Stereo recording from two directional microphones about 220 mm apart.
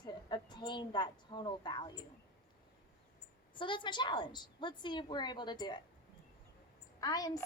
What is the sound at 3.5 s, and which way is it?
A woman's voice, 20° left (ahead or behind).